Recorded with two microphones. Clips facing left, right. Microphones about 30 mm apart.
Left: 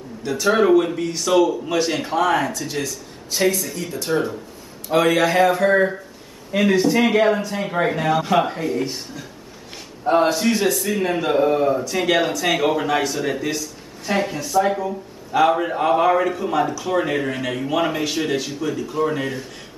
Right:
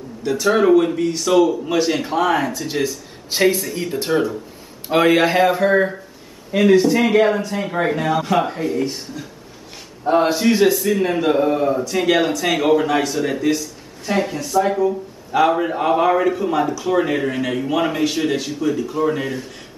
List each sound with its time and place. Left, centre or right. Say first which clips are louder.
0.2 s speech: right 1 dB; centre
3.3 s a man's voice: right 3 dB; right
5.4 s speech: right 1 dB; centre
10.2 s speech: right 3 dB; centre